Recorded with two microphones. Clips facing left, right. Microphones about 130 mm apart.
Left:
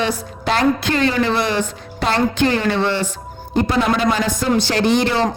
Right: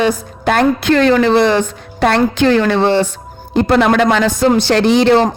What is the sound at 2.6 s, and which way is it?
Speech, 60° right (ahead or behind).